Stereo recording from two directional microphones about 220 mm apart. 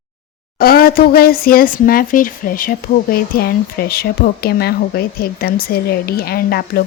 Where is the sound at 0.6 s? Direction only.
45° left (ahead or behind).